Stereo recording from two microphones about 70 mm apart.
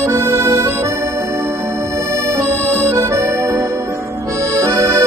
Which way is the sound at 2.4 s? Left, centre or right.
Right.